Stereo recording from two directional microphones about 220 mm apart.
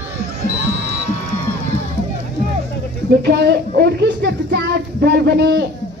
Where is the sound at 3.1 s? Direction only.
50° right (ahead or behind).